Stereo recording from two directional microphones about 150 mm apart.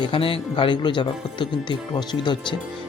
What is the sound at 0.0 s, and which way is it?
Speech, 35° left (ahead or behind).